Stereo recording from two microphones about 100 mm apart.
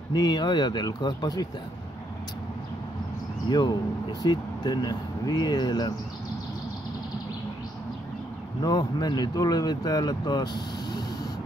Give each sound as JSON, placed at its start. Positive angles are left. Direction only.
{"t": 0.1, "sound": "speech", "side_deg": 45}
{"t": 3.4, "sound": "speech", "side_deg": 45}
{"t": 8.6, "sound": "speech", "side_deg": 40}